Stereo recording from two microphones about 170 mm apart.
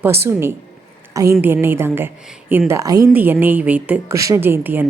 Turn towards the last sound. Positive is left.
turn(degrees=-10)  # may be behind; listen again after turning